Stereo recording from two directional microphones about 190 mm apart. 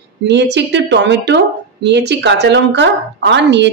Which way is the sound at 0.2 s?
65° right (ahead or behind).